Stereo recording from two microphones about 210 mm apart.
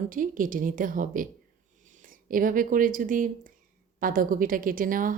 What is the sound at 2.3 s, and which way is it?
A woman's voice, 40° right (ahead or behind).